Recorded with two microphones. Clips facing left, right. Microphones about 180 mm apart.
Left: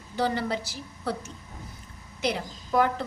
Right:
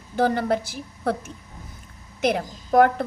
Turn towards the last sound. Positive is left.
turn(degrees=-55)  # may be behind; listen again after turning